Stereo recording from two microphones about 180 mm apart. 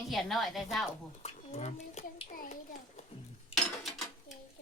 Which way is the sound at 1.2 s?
35° left (ahead or behind).